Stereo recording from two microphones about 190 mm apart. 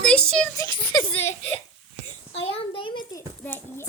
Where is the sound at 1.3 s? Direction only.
30° left (ahead or behind).